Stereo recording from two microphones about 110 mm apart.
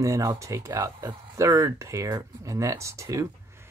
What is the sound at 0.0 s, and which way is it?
Speech, 30° right (ahead or behind).